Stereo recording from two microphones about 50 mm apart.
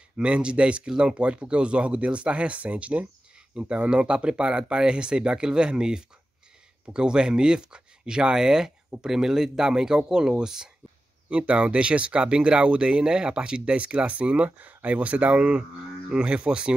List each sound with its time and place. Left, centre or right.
0.2 s speech: right
11.2 s speech: right